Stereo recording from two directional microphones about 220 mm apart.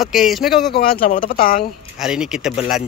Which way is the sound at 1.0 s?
40° left (ahead or behind).